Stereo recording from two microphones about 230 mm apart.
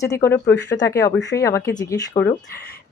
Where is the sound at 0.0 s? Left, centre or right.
Centre.